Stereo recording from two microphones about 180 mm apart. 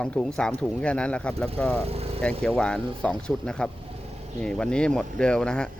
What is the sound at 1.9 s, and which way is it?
Speech, 35° right (ahead or behind).